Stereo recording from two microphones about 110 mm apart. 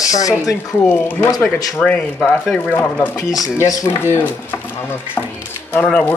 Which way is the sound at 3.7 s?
30° left (ahead or behind).